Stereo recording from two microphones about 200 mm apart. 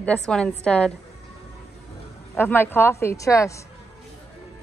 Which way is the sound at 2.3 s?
10° left (ahead or behind).